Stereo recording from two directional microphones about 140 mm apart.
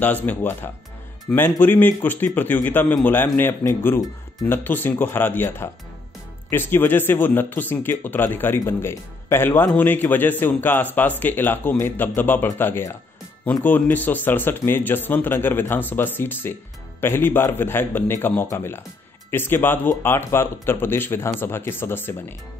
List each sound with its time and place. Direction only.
0.0 s speech: 10° left (ahead or behind)